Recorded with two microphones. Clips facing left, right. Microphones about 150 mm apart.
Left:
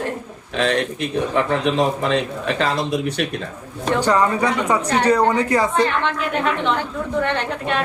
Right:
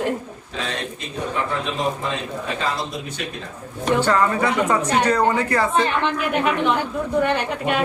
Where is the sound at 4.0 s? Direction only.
15° left (ahead or behind).